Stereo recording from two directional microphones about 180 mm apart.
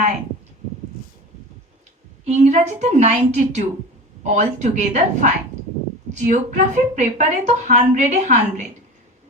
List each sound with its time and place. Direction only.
2.2 s a woman's voice: 40° right (ahead or behind)